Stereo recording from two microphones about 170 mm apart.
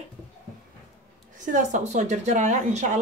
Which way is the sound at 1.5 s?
45° right (ahead or behind).